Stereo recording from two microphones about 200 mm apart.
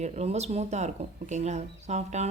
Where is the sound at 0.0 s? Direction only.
35° right (ahead or behind).